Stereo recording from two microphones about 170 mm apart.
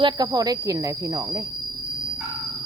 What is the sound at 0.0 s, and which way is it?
Speech, 25° right (ahead or behind).